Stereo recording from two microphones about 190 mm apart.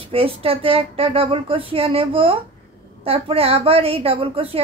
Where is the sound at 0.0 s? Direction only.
30° right (ahead or behind).